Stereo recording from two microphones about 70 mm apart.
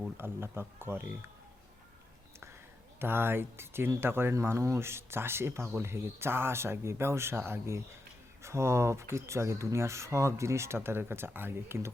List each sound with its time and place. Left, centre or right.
0.2 s speech: right
3.0 s speech: right